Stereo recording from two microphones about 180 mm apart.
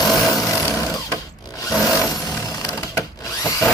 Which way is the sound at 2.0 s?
20° left (ahead or behind).